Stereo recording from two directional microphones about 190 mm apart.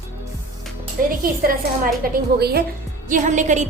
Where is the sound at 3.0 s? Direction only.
40° right (ahead or behind).